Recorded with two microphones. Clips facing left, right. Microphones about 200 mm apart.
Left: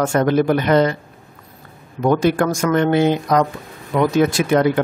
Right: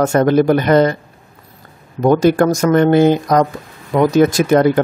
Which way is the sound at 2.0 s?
40° right (ahead or behind).